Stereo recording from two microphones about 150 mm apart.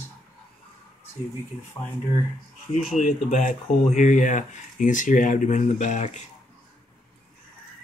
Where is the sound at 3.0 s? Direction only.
55° left (ahead or behind).